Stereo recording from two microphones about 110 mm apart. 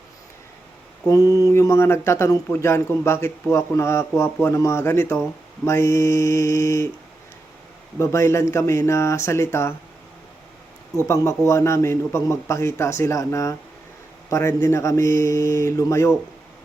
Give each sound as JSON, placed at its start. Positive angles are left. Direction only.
{"t": 1.0, "sound": "speech", "side_deg": 30}
{"t": 7.9, "sound": "speech", "side_deg": 25}
{"t": 11.1, "sound": "speech", "side_deg": 30}